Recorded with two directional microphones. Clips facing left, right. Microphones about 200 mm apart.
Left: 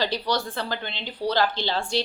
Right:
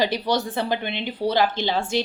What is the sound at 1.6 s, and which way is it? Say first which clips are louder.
Speech: right 3 dB; 10° right (ahead or behind).